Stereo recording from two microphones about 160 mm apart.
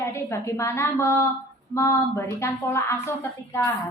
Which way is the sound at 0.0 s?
15° left (ahead or behind).